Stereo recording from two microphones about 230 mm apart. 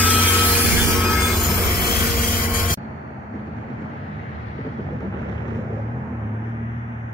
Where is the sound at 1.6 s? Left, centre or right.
Left.